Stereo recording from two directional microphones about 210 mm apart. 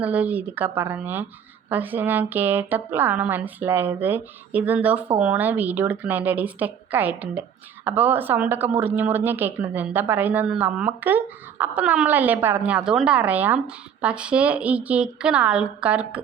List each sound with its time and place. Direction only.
0.0 s a woman's voice: 5° right (ahead or behind)